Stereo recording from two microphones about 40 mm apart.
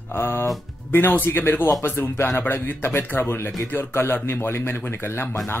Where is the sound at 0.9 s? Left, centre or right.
Left.